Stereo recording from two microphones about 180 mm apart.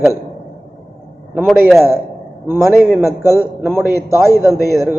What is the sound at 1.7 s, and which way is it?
A man's voice, 15° right (ahead or behind).